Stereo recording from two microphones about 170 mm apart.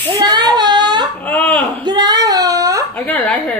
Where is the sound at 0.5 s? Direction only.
25° right (ahead or behind).